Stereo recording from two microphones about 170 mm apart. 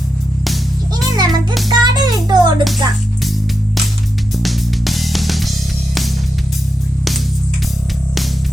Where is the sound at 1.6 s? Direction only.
25° right (ahead or behind).